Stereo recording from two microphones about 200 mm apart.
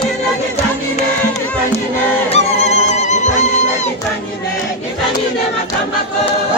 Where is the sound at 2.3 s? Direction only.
30° left (ahead or behind).